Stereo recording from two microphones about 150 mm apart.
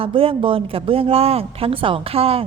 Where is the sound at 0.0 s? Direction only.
35° right (ahead or behind).